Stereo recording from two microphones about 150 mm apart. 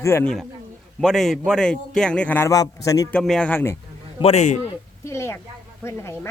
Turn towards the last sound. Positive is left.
turn(degrees=15)  # may be behind; listen again after turning